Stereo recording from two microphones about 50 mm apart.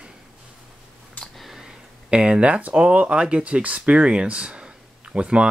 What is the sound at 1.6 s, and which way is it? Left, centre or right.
Speech, centre.